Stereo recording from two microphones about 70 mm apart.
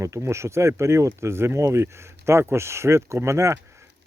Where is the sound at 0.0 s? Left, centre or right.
Right.